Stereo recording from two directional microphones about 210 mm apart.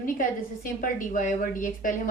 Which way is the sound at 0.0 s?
40° left (ahead or behind).